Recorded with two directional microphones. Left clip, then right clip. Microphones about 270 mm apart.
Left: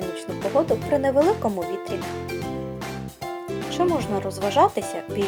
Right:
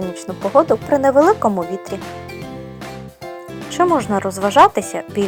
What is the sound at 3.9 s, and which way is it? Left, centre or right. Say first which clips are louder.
Speech: right 7 dB; centre.